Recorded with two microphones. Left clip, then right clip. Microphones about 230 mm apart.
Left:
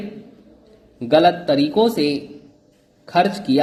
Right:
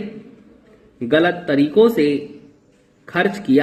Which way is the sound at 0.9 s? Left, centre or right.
Centre.